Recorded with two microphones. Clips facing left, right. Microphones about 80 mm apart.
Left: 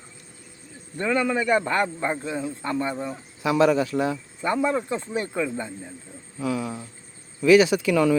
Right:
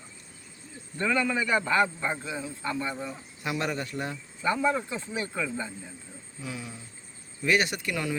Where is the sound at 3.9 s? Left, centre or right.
Left.